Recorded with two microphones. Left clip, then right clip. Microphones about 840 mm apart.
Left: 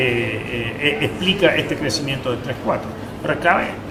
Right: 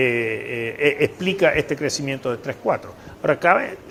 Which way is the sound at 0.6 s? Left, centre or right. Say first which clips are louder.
Right 1 dB; right.